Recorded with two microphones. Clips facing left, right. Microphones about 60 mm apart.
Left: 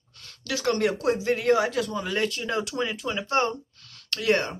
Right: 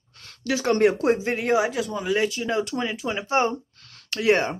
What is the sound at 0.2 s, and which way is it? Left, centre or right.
Speech, right.